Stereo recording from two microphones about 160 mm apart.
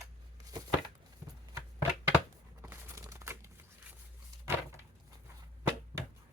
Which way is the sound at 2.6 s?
15° right (ahead or behind).